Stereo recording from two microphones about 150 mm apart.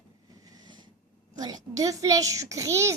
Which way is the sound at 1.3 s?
25° right (ahead or behind).